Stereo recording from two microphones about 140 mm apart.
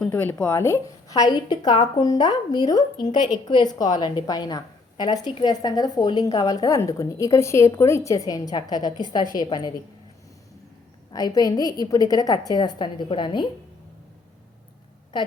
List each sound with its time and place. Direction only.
0.0 s a woman's voice: 10° left (ahead or behind); by 9.7 s 30° left (ahead or behind)
11.1 s a woman's voice: 25° left (ahead or behind)
15.1 s speech: 30° left (ahead or behind)